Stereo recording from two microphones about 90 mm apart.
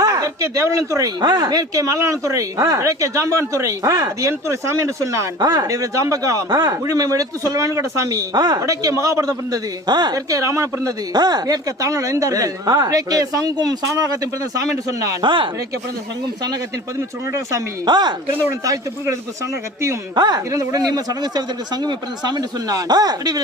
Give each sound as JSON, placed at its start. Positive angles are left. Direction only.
{"t": 0.0, "sound": "speech", "side_deg": -40}
{"t": 10.2, "sound": "speech", "side_deg": -40}
{"t": 15.2, "sound": "speech", "side_deg": -65}
{"t": 17.8, "sound": "speech", "side_deg": -55}
{"t": 18.6, "sound": "speech", "side_deg": -40}
{"t": 20.1, "sound": "speech", "side_deg": -50}